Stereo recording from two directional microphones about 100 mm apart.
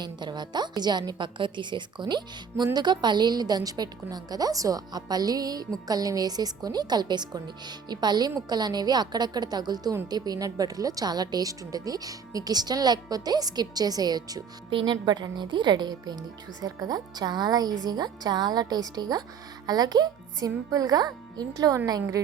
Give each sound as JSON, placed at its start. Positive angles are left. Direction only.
{"t": 0.0, "sound": "a woman's voice", "side_deg": -45}
{"t": 14.7, "sound": "a woman's voice", "side_deg": -55}